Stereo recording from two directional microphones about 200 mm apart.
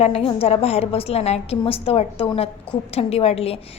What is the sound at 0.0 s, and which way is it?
A woman's voice, 30° left (ahead or behind).